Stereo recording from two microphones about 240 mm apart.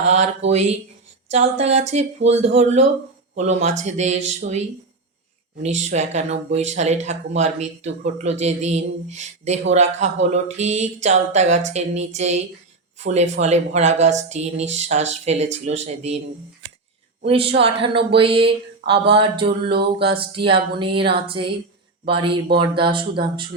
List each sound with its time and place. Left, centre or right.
0.1 s speech: right
5.6 s speech: right
17.2 s speech: right
19.6 s speech: right
20.1 s speech: right